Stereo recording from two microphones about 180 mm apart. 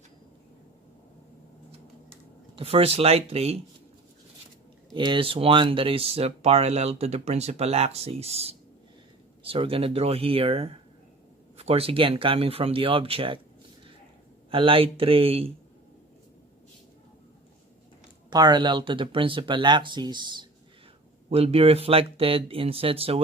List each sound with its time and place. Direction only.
2.6 s speech: 35° right (ahead or behind)
4.9 s speech: 25° right (ahead or behind)
14.5 s speech: 30° right (ahead or behind)
18.3 s speech: 25° right (ahead or behind)